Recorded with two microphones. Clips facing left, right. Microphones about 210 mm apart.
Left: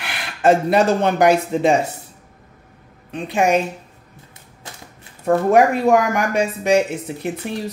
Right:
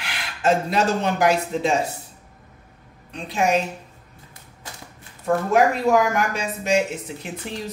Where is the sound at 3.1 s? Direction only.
60° left (ahead or behind).